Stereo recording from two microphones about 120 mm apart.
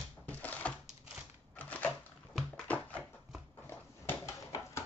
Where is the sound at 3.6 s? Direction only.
25° left (ahead or behind).